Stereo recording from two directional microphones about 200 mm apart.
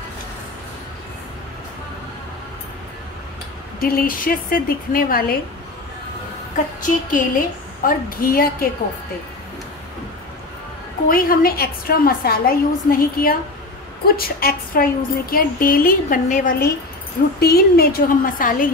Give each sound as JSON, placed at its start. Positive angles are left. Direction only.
{"t": 3.8, "sound": "a woman's voice", "side_deg": 45}
{"t": 6.8, "sound": "a woman's voice", "side_deg": 45}
{"t": 11.1, "sound": "a woman's voice", "side_deg": 45}